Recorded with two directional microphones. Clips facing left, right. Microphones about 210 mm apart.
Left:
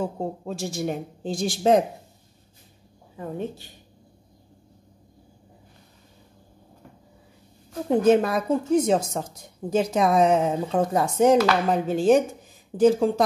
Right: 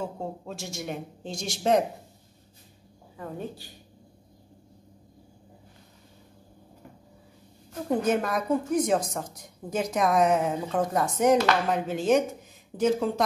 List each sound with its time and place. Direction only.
0.0 s speech: 35° left (ahead or behind)
3.2 s a woman's voice: 20° left (ahead or behind)
8.1 s a woman's voice: 30° left (ahead or behind)